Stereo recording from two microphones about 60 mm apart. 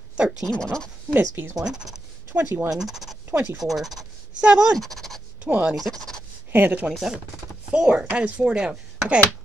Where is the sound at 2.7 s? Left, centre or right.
Centre.